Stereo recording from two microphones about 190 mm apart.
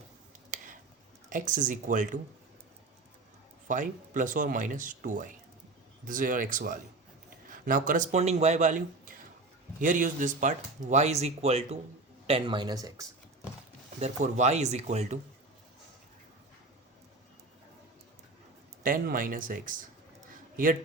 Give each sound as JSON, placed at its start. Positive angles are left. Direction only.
{"t": 0.5, "sound": "a sound", "side_deg": -45}
{"t": 1.3, "sound": "speech", "side_deg": -45}
{"t": 3.7, "sound": "speech", "side_deg": -40}
{"t": 14.0, "sound": "speech", "side_deg": -35}
{"t": 18.8, "sound": "speech", "side_deg": -45}